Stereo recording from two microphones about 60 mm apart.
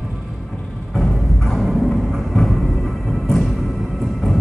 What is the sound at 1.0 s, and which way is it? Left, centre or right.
Music, centre.